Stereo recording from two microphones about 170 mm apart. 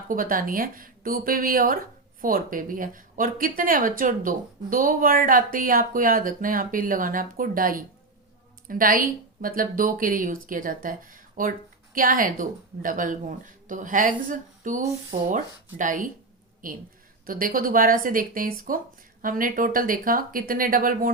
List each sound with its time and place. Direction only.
0.1 s speech: 55° right (ahead or behind)